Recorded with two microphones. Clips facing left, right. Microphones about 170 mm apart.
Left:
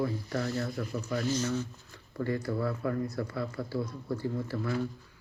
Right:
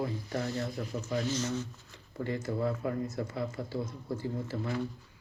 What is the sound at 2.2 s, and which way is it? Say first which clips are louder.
Speech: left 1 dB; 20° right (ahead or behind).